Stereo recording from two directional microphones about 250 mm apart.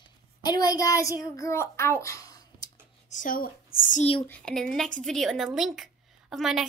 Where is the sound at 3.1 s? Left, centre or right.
Left.